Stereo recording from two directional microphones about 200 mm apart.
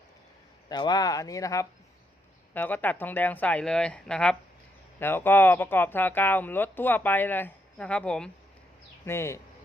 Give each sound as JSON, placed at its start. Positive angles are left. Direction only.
{"t": 0.7, "sound": "speech", "side_deg": 20}